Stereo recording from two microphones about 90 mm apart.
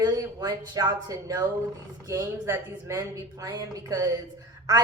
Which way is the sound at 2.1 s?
30° right (ahead or behind).